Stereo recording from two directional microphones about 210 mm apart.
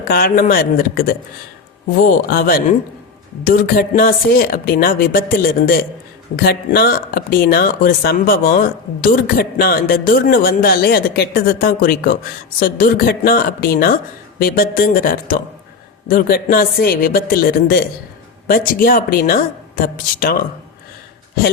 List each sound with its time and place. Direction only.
0.0 s speech: 45° left (ahead or behind)